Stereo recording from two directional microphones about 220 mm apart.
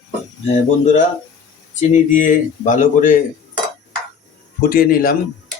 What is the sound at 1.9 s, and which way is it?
Speech, 35° left (ahead or behind).